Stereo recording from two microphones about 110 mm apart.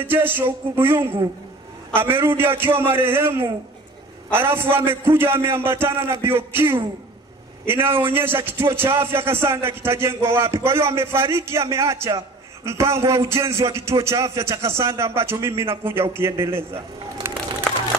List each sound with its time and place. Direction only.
0.0 s a man's voice: 20° right (ahead or behind)